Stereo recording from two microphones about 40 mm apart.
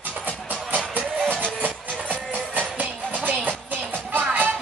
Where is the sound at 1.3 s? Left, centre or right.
Right.